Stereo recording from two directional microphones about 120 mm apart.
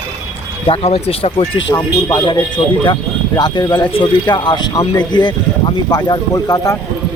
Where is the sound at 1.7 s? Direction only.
35° left (ahead or behind).